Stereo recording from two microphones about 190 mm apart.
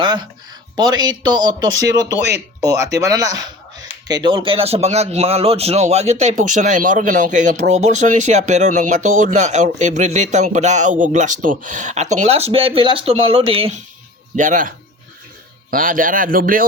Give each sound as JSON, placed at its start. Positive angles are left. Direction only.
{"t": 0.0, "sound": "speech", "side_deg": -25}
{"t": 2.1, "sound": "speech", "side_deg": -65}
{"t": 2.6, "sound": "speech", "side_deg": -20}
{"t": 14.3, "sound": "a man's voice", "side_deg": -40}
{"t": 15.7, "sound": "a man's voice", "side_deg": -45}